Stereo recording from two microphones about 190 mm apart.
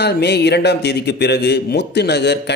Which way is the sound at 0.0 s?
60° left (ahead or behind).